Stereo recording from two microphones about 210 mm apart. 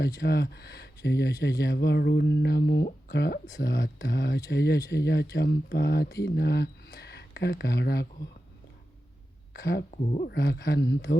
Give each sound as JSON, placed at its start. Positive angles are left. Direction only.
{"t": 0.2, "sound": "speech", "side_deg": 55}
{"t": 9.5, "sound": "speech", "side_deg": 50}